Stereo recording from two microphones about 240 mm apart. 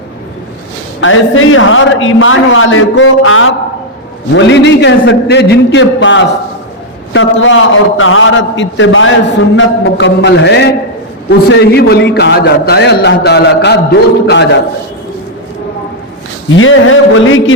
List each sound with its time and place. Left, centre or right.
1.0 s a man's voice: left
16.6 s a man's voice: left